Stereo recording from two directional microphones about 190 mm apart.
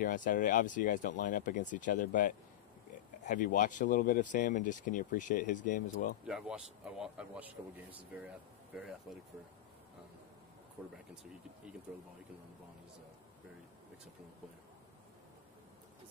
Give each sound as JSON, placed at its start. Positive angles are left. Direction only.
{"t": 0.0, "sound": "speech", "side_deg": 45}
{"t": 6.2, "sound": "speech", "side_deg": -5}